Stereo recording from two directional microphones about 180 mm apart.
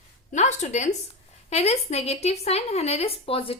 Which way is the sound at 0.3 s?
40° left (ahead or behind).